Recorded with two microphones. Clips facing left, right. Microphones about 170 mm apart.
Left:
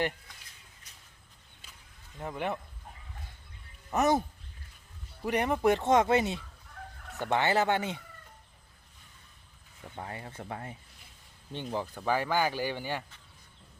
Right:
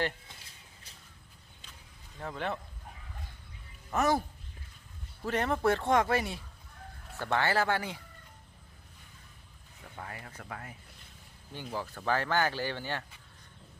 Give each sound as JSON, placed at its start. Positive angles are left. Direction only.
{"t": 0.9, "sound": "a sound", "side_deg": -30}
{"t": 2.1, "sound": "speech", "side_deg": 15}
{"t": 3.9, "sound": "speech", "side_deg": 20}
{"t": 5.2, "sound": "speech", "side_deg": 15}
{"t": 9.9, "sound": "speech", "side_deg": 25}